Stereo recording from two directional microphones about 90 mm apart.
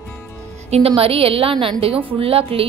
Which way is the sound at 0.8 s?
90° right.